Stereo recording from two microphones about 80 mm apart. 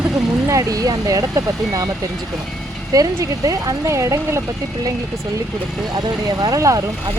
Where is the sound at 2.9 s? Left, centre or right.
Right.